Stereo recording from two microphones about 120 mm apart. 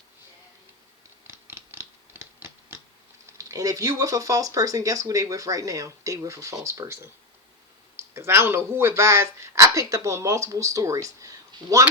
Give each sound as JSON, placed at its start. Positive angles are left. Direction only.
{"t": 1.3, "sound": "typewriter", "side_deg": -20}
{"t": 3.3, "sound": "speech", "side_deg": -30}